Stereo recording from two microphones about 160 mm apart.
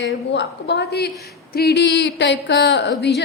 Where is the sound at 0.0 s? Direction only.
90° left.